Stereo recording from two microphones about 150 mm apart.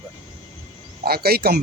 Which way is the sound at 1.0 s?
90° right.